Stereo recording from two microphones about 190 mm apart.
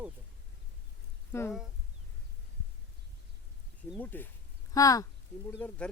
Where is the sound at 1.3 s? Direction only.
15° left (ahead or behind).